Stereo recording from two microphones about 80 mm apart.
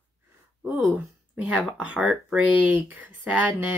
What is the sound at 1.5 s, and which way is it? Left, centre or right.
Speech, centre.